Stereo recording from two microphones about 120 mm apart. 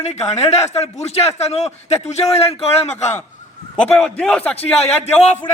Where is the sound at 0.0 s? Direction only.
65° left (ahead or behind).